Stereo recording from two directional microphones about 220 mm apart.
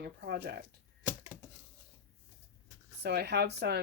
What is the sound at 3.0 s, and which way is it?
Speech, 50° right (ahead or behind).